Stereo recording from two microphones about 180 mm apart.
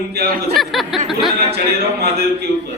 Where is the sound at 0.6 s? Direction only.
Centre (ahead or behind).